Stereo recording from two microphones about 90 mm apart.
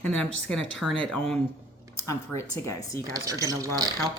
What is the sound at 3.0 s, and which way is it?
Speech, 40° right (ahead or behind).